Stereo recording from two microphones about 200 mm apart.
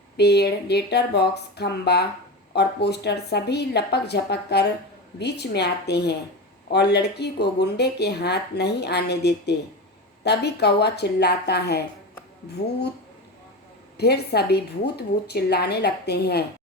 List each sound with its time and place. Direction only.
0.2 s speech: 55° left (ahead or behind)
13.9 s a woman's voice: 55° left (ahead or behind)